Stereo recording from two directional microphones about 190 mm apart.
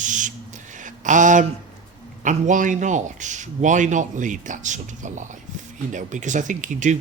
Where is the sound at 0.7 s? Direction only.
40° right (ahead or behind).